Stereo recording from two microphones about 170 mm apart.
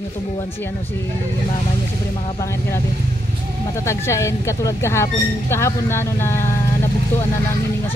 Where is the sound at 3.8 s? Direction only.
15° left (ahead or behind).